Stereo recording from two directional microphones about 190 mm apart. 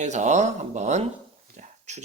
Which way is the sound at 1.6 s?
40° right (ahead or behind).